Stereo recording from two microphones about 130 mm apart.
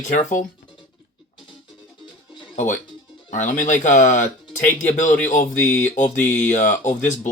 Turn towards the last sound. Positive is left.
turn(degrees=70)  # may be behind; listen again after turning